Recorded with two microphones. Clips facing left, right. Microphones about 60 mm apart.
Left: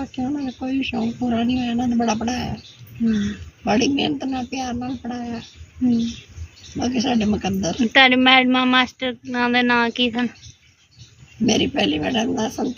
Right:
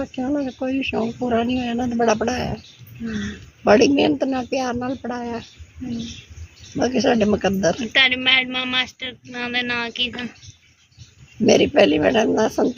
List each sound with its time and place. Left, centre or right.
0.0 s a woman's voice: right
3.6 s speech: right
5.8 s speech: centre
6.7 s speech: right
7.9 s speech: centre
11.4 s speech: right